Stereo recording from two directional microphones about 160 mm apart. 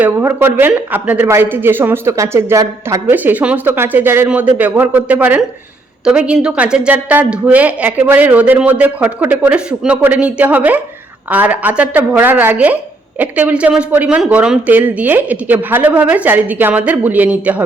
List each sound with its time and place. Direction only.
0.0 s speech: 15° right (ahead or behind)